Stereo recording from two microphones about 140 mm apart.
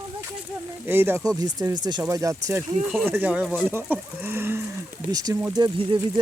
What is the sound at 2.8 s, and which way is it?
Speech, centre (ahead or behind).